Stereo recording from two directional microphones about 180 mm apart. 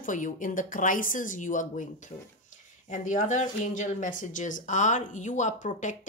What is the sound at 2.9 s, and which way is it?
Speech, 45° left (ahead or behind).